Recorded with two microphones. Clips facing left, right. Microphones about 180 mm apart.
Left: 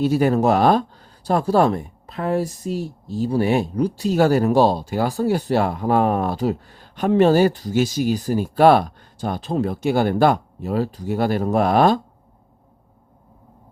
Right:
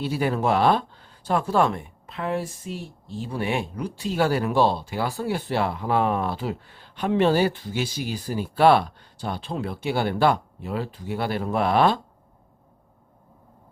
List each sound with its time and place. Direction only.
0.0 s speech: 45° left (ahead or behind)